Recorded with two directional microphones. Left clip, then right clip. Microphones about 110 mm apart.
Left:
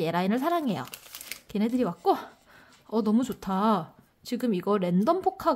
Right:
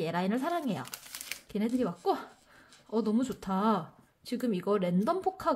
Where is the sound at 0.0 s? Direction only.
30° left (ahead or behind).